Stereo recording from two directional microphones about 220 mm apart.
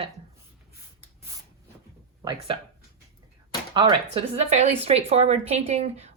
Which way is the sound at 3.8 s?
25° right (ahead or behind).